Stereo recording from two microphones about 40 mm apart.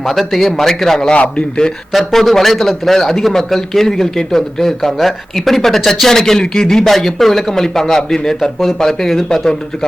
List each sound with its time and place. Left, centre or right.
0.1 s a man's voice: centre
1.1 s a man's voice: left
1.9 s a man's voice: centre